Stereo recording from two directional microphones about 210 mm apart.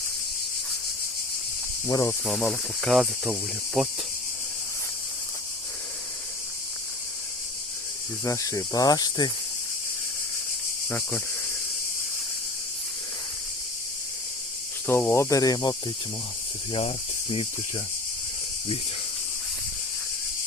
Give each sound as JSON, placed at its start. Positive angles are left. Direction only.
{"t": 1.9, "sound": "speech", "side_deg": 15}
{"t": 2.2, "sound": "speech", "side_deg": 0}
{"t": 8.2, "sound": "speech", "side_deg": 15}
{"t": 10.8, "sound": "speech", "side_deg": 10}
{"t": 14.8, "sound": "speech", "side_deg": 10}
{"t": 16.7, "sound": "speech", "side_deg": 25}